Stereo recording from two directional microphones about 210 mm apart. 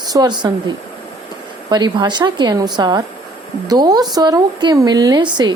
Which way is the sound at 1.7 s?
20° right (ahead or behind).